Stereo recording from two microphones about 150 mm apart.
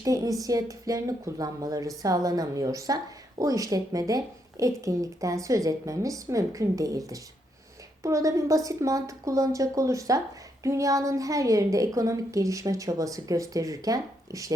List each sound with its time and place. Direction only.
0.0 s a woman's voice: 20° right (ahead or behind)